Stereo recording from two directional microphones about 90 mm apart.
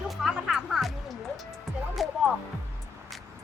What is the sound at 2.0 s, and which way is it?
Music, centre (ahead or behind).